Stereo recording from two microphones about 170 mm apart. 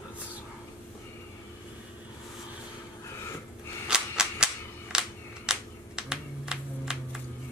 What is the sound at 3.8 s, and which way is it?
Cap gun, 5° right (ahead or behind).